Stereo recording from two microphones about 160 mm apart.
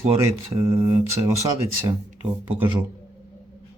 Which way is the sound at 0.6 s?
20° right (ahead or behind).